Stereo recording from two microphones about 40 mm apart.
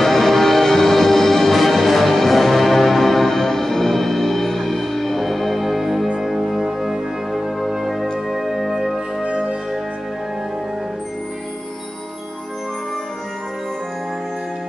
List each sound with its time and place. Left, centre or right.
0.0 s music: centre
9.2 s music: right